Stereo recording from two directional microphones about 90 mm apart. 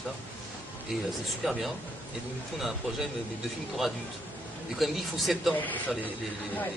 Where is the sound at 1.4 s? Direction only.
Centre (ahead or behind).